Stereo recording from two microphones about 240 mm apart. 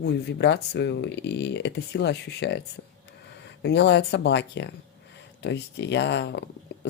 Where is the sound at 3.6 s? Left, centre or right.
Left.